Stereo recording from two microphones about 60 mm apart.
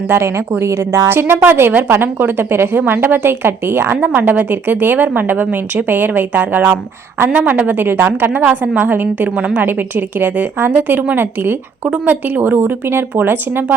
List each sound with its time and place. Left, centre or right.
0.1 s a woman's voice: right
1.0 s a woman's voice: right
8.4 s a woman's voice: right